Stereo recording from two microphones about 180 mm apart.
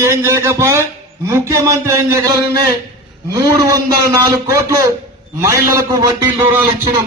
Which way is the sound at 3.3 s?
20° right (ahead or behind).